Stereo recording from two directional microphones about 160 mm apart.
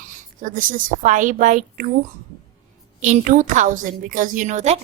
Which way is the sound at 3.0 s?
50° right (ahead or behind).